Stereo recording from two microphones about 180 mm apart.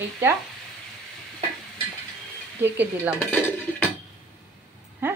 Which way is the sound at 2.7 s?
10° right (ahead or behind).